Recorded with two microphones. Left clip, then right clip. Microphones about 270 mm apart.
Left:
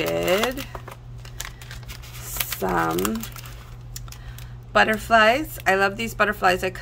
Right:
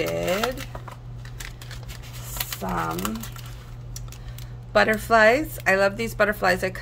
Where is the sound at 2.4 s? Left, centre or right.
Left.